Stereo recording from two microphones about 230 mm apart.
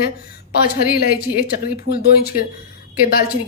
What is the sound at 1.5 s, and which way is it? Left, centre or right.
A woman's voice, left.